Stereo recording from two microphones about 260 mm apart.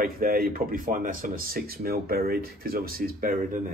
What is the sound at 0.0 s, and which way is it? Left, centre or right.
Speech, right.